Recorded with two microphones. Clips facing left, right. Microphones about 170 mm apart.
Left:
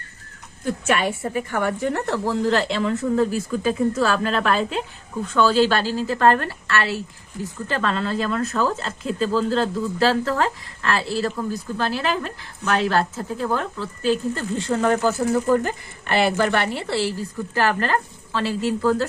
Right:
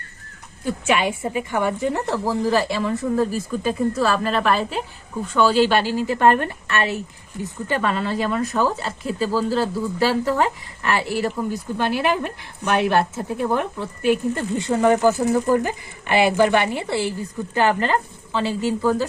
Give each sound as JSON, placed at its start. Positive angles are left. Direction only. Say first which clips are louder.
{"t": 0.6, "sound": "speech", "louder": "right 1 dB", "side_deg": -5}